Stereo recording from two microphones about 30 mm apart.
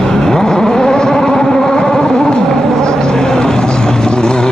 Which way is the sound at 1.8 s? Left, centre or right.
Centre.